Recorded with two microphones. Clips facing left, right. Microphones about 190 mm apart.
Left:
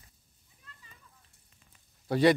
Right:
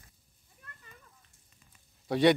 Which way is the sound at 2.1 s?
Centre (ahead or behind).